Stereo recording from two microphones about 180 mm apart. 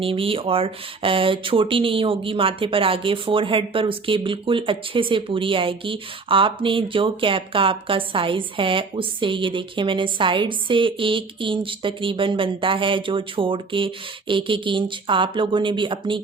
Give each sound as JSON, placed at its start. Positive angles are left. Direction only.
{"t": 0.0, "sound": "speech", "side_deg": -30}